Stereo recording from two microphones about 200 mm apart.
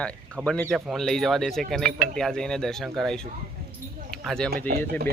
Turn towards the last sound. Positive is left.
turn(degrees=-50)  # may be behind; listen again after turning